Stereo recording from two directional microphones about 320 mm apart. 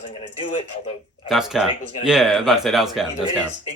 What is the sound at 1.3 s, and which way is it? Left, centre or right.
Speech, centre.